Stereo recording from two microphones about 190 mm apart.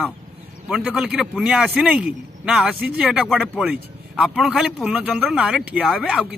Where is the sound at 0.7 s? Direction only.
5° right (ahead or behind).